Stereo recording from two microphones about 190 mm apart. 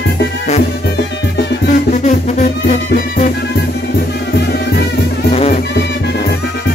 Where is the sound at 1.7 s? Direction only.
40° left (ahead or behind).